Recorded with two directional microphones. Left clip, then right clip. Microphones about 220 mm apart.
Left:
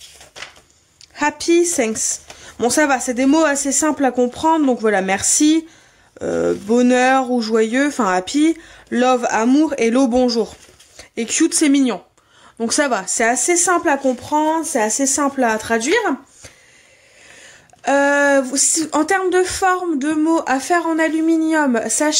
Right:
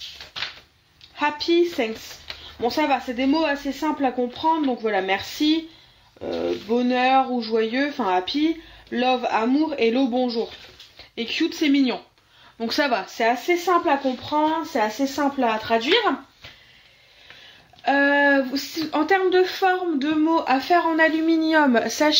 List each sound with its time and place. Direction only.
1.1 s speech: 50° left (ahead or behind)
17.8 s speech: 45° left (ahead or behind); by 22.1 s 25° left (ahead or behind)